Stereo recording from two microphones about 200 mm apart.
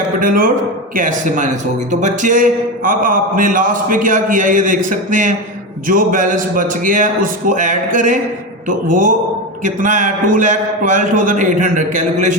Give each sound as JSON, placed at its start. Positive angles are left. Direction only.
{"t": 0.2, "sound": "a man's voice", "side_deg": -45}